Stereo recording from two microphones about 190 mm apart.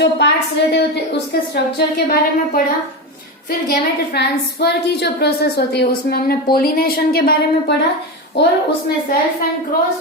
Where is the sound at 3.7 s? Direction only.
60° left (ahead or behind).